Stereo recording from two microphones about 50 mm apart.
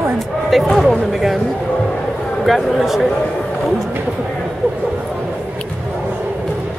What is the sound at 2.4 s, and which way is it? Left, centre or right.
Speech, centre.